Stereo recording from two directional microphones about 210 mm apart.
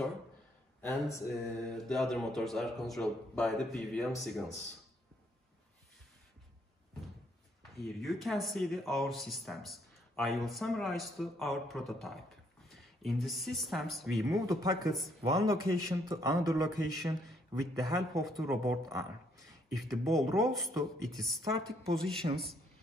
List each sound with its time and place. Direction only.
1.1 s speech: 5° left (ahead or behind)
7.7 s speech: centre (ahead or behind)
14.3 s a man's voice: 15° right (ahead or behind)
14.9 s speech: centre (ahead or behind)
15.3 s a man's voice: 15° right (ahead or behind)
18.2 s speech: centre (ahead or behind)
18.9 s speech: 15° right (ahead or behind)
19.4 s speech: centre (ahead or behind)